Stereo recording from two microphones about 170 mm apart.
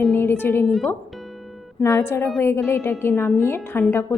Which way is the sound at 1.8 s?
15° left (ahead or behind).